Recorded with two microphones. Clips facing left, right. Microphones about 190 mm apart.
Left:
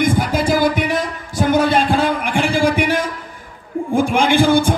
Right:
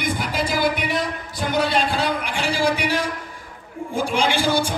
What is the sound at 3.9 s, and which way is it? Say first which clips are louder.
Heart murmur: left 6 dB; 55° left (ahead or behind).